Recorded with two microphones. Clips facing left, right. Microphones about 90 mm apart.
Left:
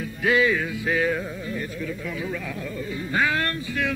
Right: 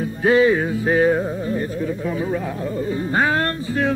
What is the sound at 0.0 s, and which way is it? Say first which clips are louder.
Music: right 6 dB; 35° right (ahead or behind).